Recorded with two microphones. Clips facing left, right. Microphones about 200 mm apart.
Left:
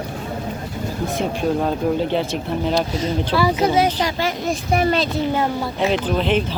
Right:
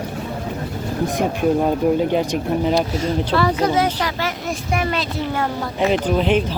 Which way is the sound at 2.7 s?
Centre (ahead or behind).